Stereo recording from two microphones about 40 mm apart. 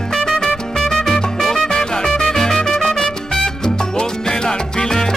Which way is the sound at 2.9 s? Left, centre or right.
Centre.